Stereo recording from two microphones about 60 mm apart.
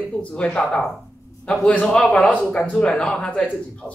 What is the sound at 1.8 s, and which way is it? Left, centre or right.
A man's voice, centre.